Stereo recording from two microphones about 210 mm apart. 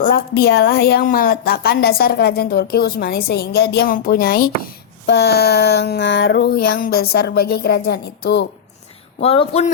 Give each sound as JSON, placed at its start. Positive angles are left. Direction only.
{"t": 0.0, "sound": "a woman's voice", "side_deg": 45}
{"t": 9.2, "sound": "speech", "side_deg": 25}